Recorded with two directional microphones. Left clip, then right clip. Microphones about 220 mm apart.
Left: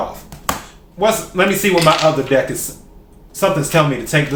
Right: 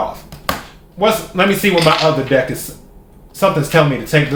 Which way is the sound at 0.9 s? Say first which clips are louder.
Right 1 dB; 15° right (ahead or behind).